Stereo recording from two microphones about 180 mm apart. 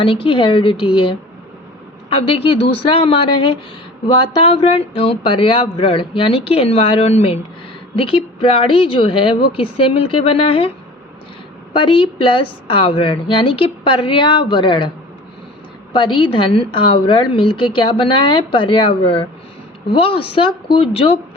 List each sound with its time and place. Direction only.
0.0 s a woman's voice: 30° left (ahead or behind)
11.7 s a woman's voice: 30° left (ahead or behind)
15.9 s a woman's voice: 25° left (ahead or behind)